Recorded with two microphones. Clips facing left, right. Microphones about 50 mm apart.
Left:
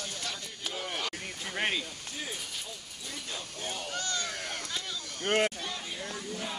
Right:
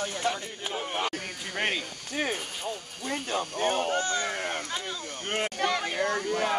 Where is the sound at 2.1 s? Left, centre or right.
Right.